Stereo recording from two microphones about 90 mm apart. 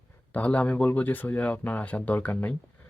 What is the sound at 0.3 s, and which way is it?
Speech, 15° left (ahead or behind).